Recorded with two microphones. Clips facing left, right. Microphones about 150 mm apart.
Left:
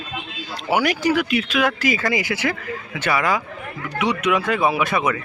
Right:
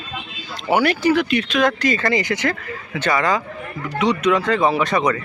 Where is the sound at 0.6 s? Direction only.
10° left (ahead or behind).